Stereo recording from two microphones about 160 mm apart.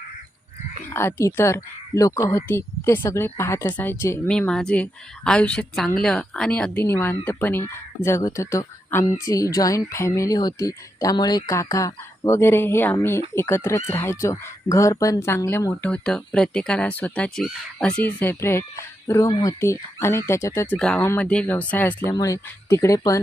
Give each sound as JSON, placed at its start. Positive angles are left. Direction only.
{"t": 0.9, "sound": "a woman's voice", "side_deg": 15}
{"t": 15.9, "sound": "a woman's voice", "side_deg": 5}
{"t": 22.1, "sound": "speech", "side_deg": 20}